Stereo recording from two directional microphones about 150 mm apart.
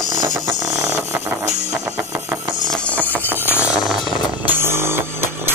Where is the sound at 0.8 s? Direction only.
20° right (ahead or behind).